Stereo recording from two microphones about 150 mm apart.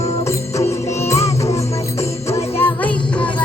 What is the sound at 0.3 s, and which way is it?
Music, 20° left (ahead or behind).